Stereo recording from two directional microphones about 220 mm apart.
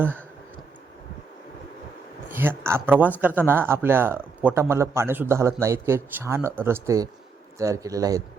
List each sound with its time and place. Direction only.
2.3 s speech: 10° right (ahead or behind)